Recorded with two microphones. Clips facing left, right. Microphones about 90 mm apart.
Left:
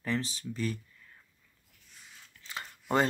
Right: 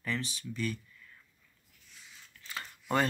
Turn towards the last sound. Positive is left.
turn(degrees=25)  # may be behind; listen again after turning